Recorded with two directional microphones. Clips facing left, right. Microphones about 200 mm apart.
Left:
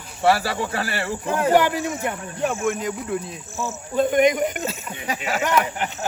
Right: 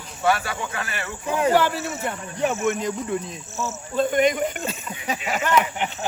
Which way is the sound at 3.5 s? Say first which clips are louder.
Left 2 dB; 15° left (ahead or behind).